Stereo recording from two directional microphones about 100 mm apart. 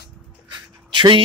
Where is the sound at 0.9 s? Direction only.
50° right (ahead or behind).